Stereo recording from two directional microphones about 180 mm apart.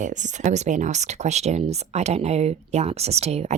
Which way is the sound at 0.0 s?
45° right (ahead or behind).